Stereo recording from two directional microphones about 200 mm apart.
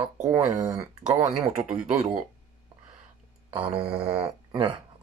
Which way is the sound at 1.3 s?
5° right (ahead or behind).